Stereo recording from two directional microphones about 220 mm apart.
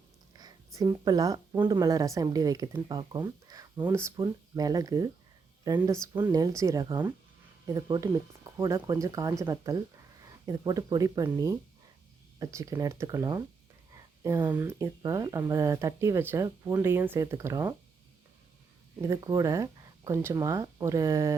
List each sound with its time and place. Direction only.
0.3 s speech: 15° right (ahead or behind)
19.0 s speech: 15° right (ahead or behind)